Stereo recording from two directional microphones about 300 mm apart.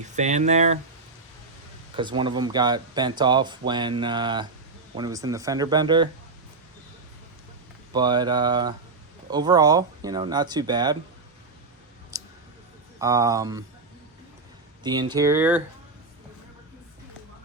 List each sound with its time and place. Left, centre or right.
0.2 s speech: right
2.0 s speech: centre
7.9 s speech: centre
12.1 s a sound: centre
13.0 s speech: centre
14.8 s speech: centre